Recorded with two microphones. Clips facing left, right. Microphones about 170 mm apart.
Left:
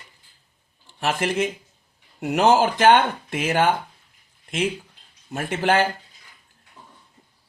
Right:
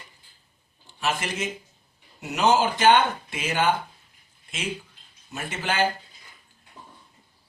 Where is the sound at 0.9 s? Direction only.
60° left (ahead or behind).